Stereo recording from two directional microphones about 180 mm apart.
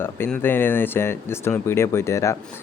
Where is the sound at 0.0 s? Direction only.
10° left (ahead or behind).